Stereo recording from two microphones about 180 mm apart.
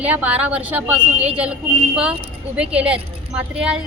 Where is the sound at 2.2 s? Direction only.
5° right (ahead or behind).